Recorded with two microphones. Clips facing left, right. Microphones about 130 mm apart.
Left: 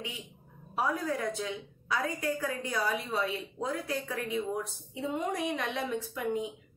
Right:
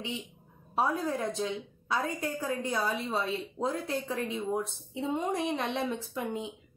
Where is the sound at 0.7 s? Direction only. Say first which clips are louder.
Right 2 dB; 25° right (ahead or behind).